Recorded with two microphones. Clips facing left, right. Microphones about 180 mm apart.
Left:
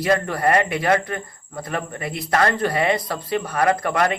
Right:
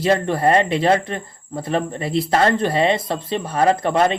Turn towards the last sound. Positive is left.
turn(degrees=-25)  # may be behind; listen again after turning